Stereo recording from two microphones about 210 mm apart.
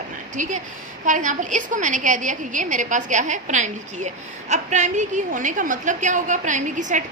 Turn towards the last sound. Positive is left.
turn(degrees=-35)  # may be behind; listen again after turning